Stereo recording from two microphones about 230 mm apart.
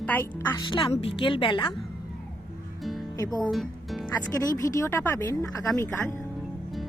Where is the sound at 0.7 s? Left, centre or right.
Left.